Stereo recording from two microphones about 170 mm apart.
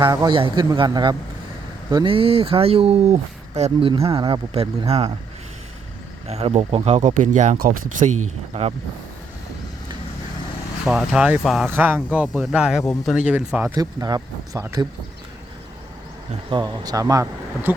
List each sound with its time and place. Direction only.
0.0 s speech: 25° right (ahead or behind)
6.2 s speech: 35° right (ahead or behind)
10.8 s speech: 5° right (ahead or behind)
13.7 s speech: 20° right (ahead or behind)
16.5 s speech: 25° right (ahead or behind)